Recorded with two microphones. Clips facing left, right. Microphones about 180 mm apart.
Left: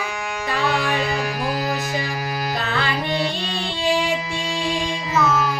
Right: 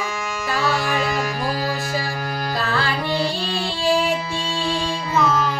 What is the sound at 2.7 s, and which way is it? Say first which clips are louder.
Music: right 2 dB; 20° left (ahead or behind).